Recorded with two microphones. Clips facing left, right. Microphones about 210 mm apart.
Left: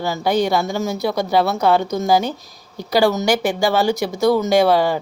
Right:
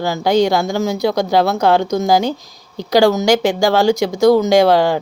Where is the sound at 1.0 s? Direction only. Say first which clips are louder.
Right 3 dB; 90° right.